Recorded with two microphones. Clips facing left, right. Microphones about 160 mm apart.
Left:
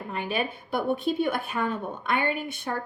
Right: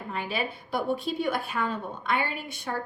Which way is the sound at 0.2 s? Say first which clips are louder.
Left 3 dB; 55° left (ahead or behind).